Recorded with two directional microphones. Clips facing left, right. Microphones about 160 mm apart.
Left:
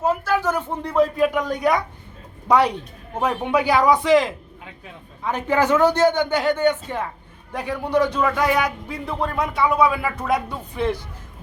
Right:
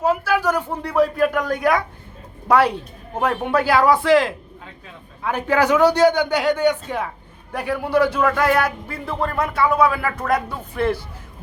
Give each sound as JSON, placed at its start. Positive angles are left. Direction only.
{"t": 0.1, "sound": "speech", "side_deg": -10}
{"t": 4.0, "sound": "a man's voice", "side_deg": 20}
{"t": 5.2, "sound": "speech", "side_deg": -10}